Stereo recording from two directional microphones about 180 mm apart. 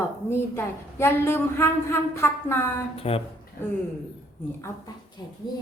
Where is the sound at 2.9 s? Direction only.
30° left (ahead or behind).